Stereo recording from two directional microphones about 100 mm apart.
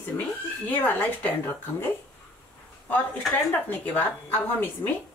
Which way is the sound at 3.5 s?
20° left (ahead or behind).